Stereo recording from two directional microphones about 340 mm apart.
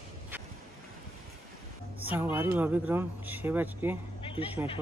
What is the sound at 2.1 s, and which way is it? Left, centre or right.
Speech, centre.